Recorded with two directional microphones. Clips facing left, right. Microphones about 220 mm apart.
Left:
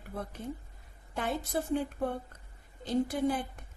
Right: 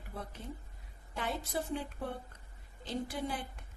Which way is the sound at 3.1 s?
55° left (ahead or behind).